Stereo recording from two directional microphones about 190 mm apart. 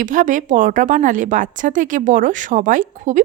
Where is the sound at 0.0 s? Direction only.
45° right (ahead or behind).